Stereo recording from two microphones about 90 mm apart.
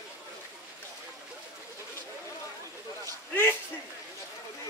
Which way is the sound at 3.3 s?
20° left (ahead or behind).